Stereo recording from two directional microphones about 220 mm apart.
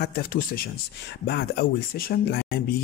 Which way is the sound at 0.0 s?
40° left (ahead or behind).